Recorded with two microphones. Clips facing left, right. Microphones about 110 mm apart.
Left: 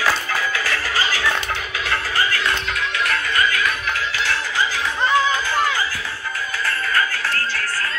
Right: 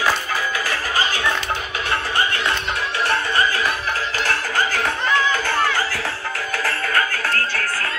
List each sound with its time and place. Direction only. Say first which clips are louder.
0.7 s music: even; 20° right (ahead or behind)
4.3 s music: right 2 dB; 50° right (ahead or behind)
6.6 s music: even; 60° right (ahead or behind)